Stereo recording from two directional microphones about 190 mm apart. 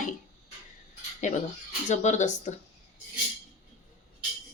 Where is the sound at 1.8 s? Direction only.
40° left (ahead or behind).